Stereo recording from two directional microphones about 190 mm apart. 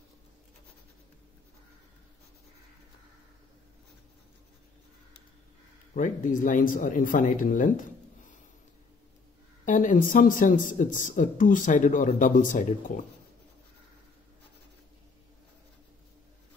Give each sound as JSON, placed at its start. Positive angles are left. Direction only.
{"t": 5.9, "sound": "speech", "side_deg": 40}
{"t": 9.7, "sound": "speech", "side_deg": 40}